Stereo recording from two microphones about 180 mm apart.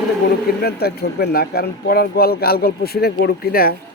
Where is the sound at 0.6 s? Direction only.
60° left (ahead or behind).